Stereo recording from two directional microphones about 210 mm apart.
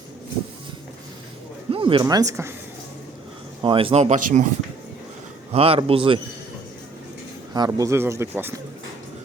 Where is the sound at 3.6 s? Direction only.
25° right (ahead or behind).